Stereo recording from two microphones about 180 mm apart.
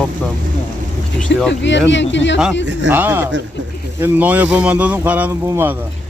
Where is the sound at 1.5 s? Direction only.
80° left.